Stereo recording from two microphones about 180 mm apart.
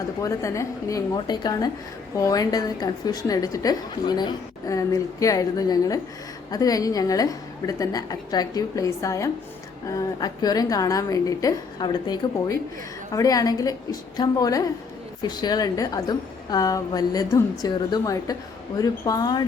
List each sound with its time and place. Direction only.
0.2 s a woman's voice: 15° left (ahead or behind)